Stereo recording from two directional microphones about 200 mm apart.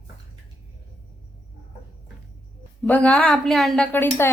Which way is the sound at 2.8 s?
5° left (ahead or behind).